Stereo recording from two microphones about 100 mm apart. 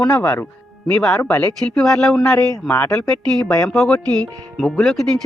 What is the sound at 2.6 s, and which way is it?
Speech, 20° left (ahead or behind).